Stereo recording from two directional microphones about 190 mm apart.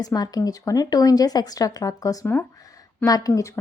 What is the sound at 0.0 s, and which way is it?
Speech, 20° left (ahead or behind).